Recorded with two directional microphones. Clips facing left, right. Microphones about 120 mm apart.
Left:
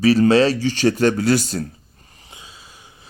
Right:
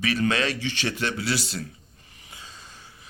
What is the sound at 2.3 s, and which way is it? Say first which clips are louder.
Snort: left 1 dB; 10° left (ahead or behind).